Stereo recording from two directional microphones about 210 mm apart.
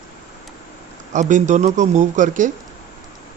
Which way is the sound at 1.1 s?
35° right (ahead or behind).